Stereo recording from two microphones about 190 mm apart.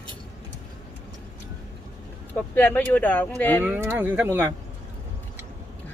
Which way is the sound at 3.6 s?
10° right (ahead or behind).